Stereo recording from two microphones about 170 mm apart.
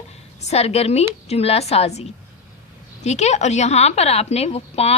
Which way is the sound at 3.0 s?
40° left (ahead or behind).